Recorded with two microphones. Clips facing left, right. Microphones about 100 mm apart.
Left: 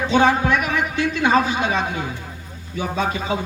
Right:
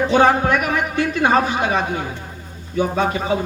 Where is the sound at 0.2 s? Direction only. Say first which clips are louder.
Even; 50° right (ahead or behind).